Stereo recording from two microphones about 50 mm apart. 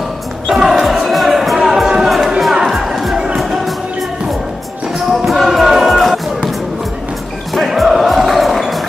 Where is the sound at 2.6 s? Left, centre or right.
Centre.